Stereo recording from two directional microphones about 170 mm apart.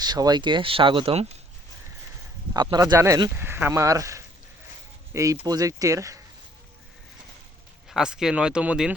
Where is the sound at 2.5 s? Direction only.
25° right (ahead or behind).